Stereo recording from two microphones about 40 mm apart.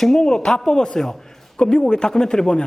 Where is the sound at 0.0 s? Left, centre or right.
Centre.